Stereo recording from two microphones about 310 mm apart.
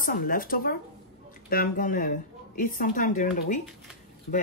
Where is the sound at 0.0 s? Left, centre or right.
Left.